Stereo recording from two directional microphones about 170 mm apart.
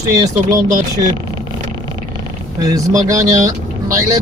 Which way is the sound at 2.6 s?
20° right (ahead or behind).